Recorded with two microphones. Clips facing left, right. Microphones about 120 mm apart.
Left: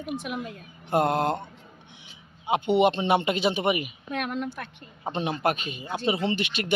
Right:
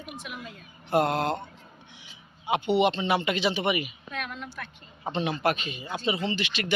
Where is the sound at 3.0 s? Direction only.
50° left (ahead or behind).